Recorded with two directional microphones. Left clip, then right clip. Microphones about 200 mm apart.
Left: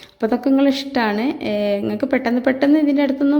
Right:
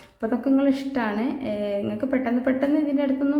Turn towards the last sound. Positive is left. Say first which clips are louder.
# left 6 dB
turn(degrees=35)  # may be behind; listen again after turning